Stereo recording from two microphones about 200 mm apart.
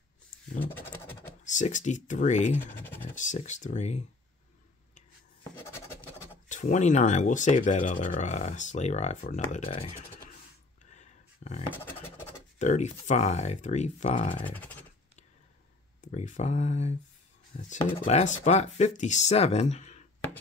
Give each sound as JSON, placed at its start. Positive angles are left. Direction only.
{"t": 0.6, "sound": "scratch", "side_deg": 10}
{"t": 1.4, "sound": "speech", "side_deg": 40}
{"t": 5.7, "sound": "scratch", "side_deg": 10}
{"t": 6.5, "sound": "speech", "side_deg": 35}
{"t": 10.9, "sound": "a sound", "side_deg": 35}
{"t": 11.7, "sound": "a sound", "side_deg": 10}
{"t": 12.5, "sound": "speech", "side_deg": 35}
{"t": 14.4, "sound": "a sound", "side_deg": 10}
{"t": 16.0, "sound": "speech", "side_deg": 35}
{"t": 17.9, "sound": "speech", "side_deg": 30}